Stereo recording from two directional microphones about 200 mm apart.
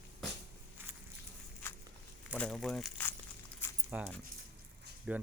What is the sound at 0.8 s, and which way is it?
Walk, 10° right (ahead or behind).